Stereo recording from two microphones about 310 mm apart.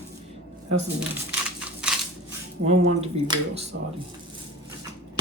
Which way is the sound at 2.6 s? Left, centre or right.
Centre.